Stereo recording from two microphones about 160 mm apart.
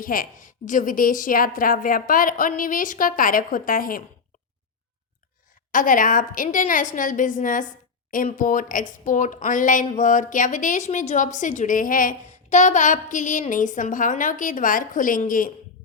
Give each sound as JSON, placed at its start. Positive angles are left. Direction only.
{"t": 0.0, "sound": "a woman's voice", "side_deg": 60}
{"t": 5.7, "sound": "a woman's voice", "side_deg": 55}